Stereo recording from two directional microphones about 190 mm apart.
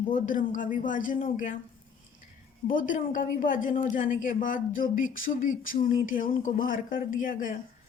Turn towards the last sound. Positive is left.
turn(degrees=45)  # may be behind; listen again after turning